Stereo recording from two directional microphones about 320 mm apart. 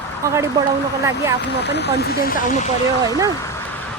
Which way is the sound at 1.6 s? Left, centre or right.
Left.